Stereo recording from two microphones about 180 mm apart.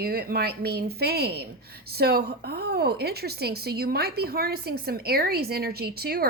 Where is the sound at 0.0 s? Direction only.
60° right (ahead or behind).